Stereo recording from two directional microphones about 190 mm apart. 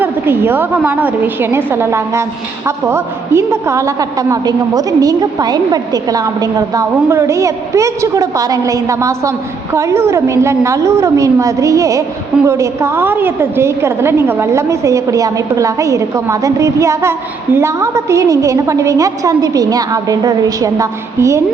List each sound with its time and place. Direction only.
0.0 s a woman's voice: 10° right (ahead or behind)